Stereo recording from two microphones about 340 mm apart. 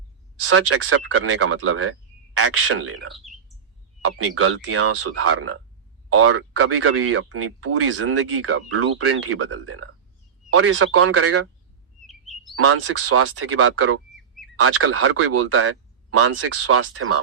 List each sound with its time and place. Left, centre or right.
0.4 s speech: right
12.5 s speech: right